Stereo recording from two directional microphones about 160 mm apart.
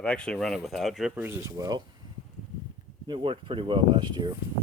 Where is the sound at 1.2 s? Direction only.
15° right (ahead or behind).